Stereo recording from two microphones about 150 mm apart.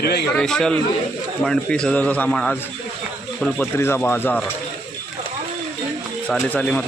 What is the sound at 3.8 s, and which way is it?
Speech, 15° left (ahead or behind).